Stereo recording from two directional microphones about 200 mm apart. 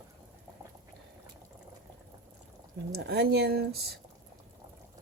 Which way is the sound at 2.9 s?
55° right (ahead or behind).